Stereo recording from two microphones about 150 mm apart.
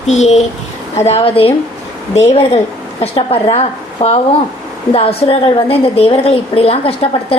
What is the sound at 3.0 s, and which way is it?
A woman's voice, 40° left (ahead or behind).